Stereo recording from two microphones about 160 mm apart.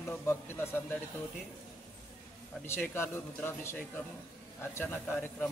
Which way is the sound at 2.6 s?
15° left (ahead or behind).